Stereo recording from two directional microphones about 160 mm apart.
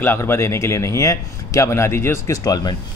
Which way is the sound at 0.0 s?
15° left (ahead or behind).